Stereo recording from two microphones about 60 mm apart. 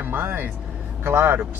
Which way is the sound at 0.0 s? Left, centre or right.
Right.